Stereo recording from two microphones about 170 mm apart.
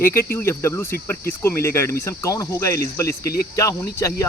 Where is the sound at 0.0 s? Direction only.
15° left (ahead or behind).